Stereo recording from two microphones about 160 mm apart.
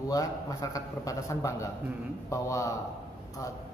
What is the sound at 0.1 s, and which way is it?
A man's voice, 20° left (ahead or behind).